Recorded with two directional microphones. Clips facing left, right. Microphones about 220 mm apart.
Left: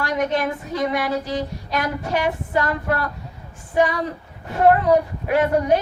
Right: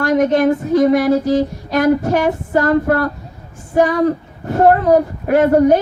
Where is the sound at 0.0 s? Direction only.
45° right (ahead or behind).